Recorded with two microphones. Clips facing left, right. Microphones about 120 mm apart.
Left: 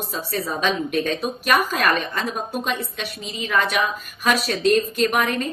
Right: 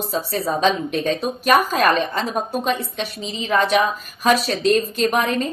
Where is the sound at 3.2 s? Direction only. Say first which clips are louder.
Right 3 dB; 30° right (ahead or behind).